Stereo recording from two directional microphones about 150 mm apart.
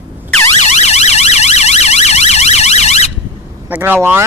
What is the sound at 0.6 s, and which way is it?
Emergency vehicle, 50° left (ahead or behind).